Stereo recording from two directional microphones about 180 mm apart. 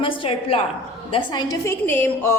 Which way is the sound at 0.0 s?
30° left (ahead or behind).